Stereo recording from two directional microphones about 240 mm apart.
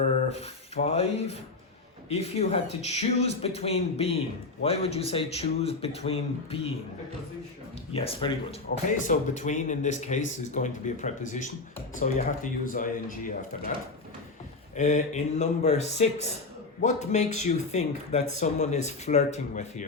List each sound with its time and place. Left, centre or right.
0.3 s speech: left
7.9 s speech: left
14.8 s speech: left